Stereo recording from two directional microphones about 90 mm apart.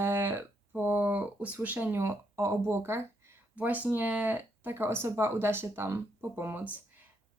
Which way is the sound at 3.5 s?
15° right (ahead or behind).